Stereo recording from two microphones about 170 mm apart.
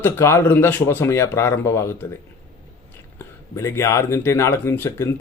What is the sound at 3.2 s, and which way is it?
Speech, 15° left (ahead or behind).